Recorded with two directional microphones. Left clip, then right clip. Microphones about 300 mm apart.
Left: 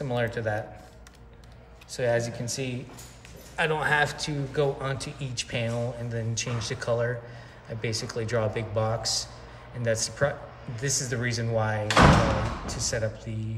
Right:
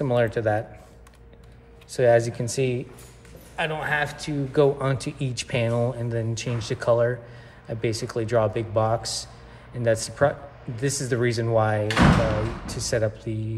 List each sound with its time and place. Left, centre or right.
0.0 s speech: centre
1.9 s speech: centre
3.5 s a man's voice: centre
4.6 s speech: centre